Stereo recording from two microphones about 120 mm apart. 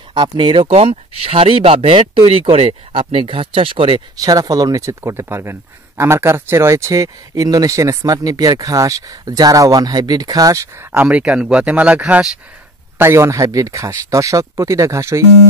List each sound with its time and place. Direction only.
0.1 s speech: 40° right (ahead or behind)
0.7 s speech: 55° right (ahead or behind)
4.2 s speech: 30° right (ahead or behind); by 12.3 s 10° right (ahead or behind)
12.9 s speech: 20° right (ahead or behind)